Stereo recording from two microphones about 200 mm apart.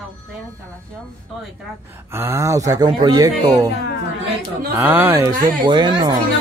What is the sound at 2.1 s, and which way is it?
Speech, 15° right (ahead or behind).